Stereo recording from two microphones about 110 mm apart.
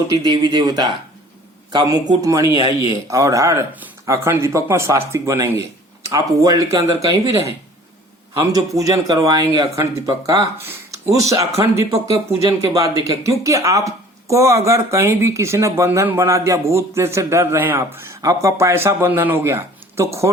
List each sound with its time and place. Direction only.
0.1 s a man's voice: 40° right (ahead or behind)
10.6 s a man's voice: 20° right (ahead or behind)